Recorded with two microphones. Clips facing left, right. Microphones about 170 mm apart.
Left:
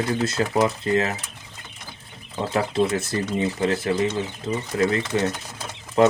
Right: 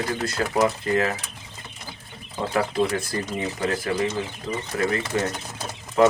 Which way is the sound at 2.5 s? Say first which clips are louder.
Left 1 dB; 25° left (ahead or behind).